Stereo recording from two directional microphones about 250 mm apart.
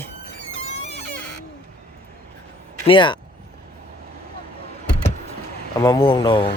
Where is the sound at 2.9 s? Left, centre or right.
Centre.